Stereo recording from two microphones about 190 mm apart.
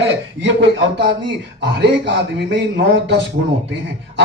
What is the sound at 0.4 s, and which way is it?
A man's voice, 70° right (ahead or behind).